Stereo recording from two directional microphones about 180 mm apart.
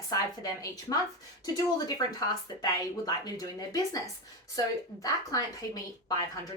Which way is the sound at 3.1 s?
20° left (ahead or behind).